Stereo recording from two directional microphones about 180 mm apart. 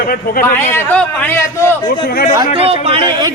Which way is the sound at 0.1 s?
55° left (ahead or behind).